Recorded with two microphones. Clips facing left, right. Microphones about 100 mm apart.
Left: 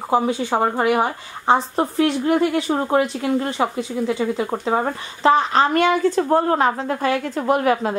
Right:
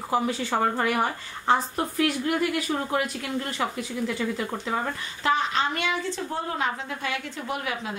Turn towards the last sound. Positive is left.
turn(degrees=50)  # may be behind; listen again after turning